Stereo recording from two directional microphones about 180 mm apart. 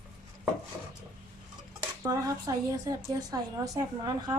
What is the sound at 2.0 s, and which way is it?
A woman's voice, 20° right (ahead or behind).